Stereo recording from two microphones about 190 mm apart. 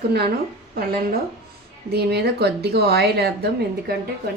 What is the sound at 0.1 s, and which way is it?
A woman's voice, 55° right (ahead or behind).